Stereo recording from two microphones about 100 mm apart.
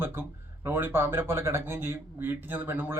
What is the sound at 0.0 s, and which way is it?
Speech, 25° right (ahead or behind).